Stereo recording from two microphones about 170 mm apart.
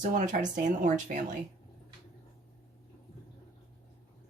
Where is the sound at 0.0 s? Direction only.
50° right (ahead or behind).